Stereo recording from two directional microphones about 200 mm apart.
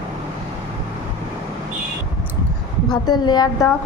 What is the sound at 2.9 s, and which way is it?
Speech, 20° left (ahead or behind).